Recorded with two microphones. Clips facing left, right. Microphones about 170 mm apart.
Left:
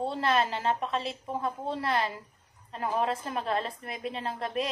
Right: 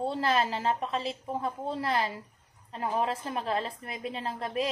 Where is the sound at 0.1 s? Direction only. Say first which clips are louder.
Even; 35° right (ahead or behind).